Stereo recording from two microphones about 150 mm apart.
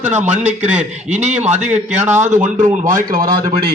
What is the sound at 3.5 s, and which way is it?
Speech, 90° right.